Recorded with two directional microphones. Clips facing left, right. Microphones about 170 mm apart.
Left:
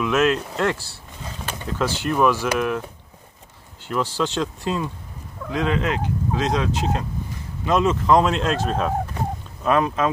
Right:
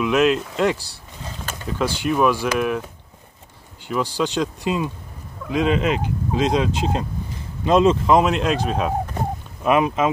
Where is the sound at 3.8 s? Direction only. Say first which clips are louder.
Right 1 dB; 10° right (ahead or behind).